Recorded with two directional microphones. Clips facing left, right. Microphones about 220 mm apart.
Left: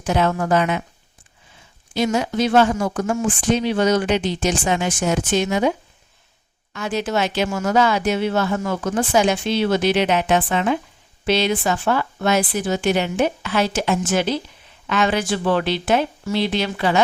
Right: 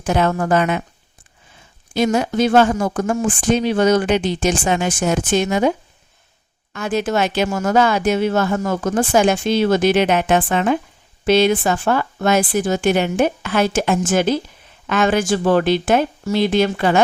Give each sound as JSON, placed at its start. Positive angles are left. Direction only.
{"t": 0.0, "sound": "speech", "side_deg": -50}
{"t": 1.9, "sound": "speech", "side_deg": -50}
{"t": 6.7, "sound": "speech", "side_deg": -50}